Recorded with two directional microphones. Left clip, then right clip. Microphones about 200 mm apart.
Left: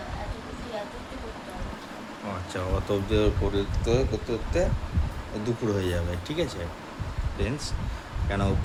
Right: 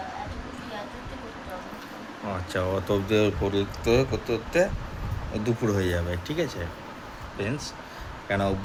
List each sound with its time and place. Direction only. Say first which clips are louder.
2.5 s speech: right 3 dB; 10° right (ahead or behind)